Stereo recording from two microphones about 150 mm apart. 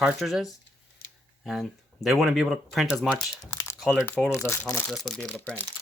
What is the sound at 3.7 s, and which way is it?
Crumpling, centre (ahead or behind).